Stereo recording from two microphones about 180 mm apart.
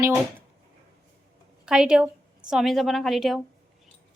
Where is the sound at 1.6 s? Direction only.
5° right (ahead or behind).